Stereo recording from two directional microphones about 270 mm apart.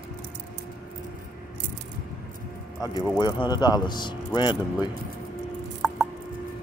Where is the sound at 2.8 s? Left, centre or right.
Centre.